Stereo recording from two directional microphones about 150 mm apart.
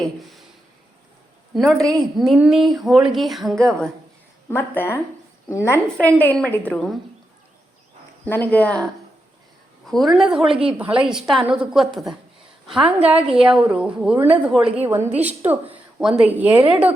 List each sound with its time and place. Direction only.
1.5 s speech: centre (ahead or behind)
4.4 s a woman's voice: 15° left (ahead or behind)
8.2 s a woman's voice: 10° left (ahead or behind); by 16.6 s 10° right (ahead or behind)
16.6 s speech: 35° right (ahead or behind)